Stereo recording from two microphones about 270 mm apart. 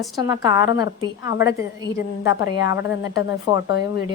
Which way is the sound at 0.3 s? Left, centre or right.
Centre.